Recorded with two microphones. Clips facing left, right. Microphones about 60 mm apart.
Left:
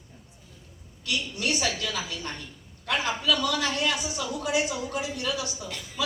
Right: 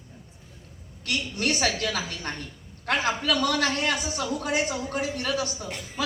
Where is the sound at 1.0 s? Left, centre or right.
Right.